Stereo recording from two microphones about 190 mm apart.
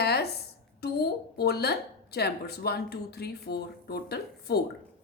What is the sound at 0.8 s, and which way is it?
A woman's voice, 55° left (ahead or behind).